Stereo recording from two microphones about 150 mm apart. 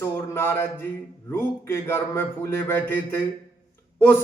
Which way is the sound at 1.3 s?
15° left (ahead or behind).